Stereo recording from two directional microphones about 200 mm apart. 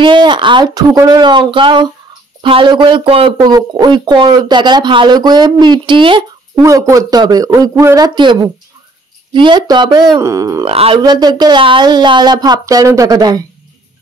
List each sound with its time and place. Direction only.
0.0 s speech: 25° right (ahead or behind)
10.7 s speech: 30° right (ahead or behind)